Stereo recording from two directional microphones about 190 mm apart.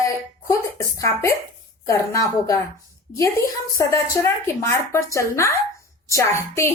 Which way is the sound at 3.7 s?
15° left (ahead or behind).